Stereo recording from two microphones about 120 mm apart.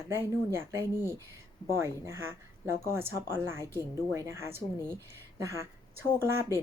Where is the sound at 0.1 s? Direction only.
20° right (ahead or behind).